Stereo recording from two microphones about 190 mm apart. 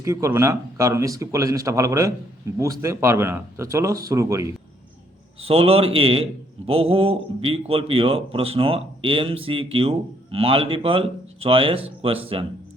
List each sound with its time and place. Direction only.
0.0 s speech: 15° right (ahead or behind)
5.4 s a man's voice: 30° right (ahead or behind)